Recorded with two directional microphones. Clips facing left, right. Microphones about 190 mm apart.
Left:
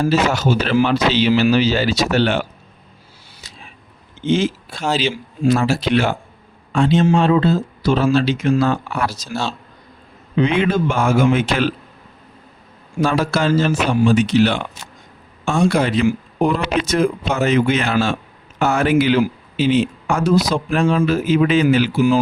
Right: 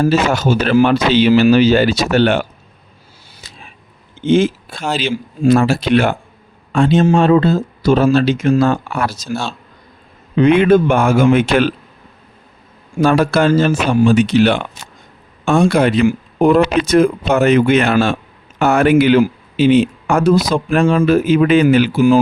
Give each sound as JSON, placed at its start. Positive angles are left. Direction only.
{"t": 0.0, "sound": "speech", "side_deg": -50}
{"t": 3.4, "sound": "a sound", "side_deg": -55}
{"t": 4.3, "sound": "speech", "side_deg": -55}
{"t": 10.4, "sound": "speech", "side_deg": -55}
{"t": 13.0, "sound": "speech", "side_deg": -60}